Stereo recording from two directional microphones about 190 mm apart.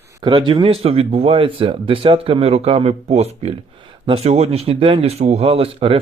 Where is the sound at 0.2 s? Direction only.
25° right (ahead or behind).